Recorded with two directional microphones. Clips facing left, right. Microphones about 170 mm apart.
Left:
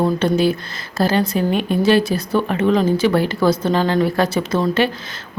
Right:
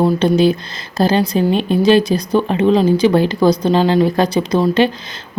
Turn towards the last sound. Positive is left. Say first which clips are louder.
# right 4 dB
turn(degrees=-15)  # may be behind; listen again after turning